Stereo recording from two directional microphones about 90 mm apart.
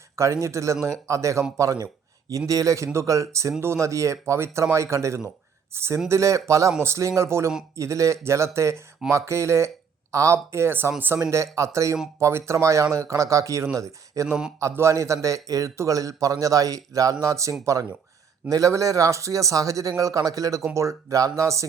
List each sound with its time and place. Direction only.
0.2 s speech: 35° right (ahead or behind)